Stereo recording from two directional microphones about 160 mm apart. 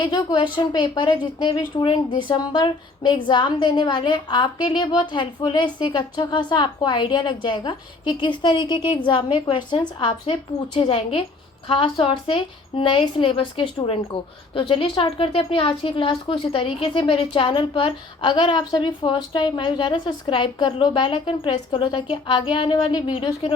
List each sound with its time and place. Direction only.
0.0 s a woman's voice: 30° left (ahead or behind)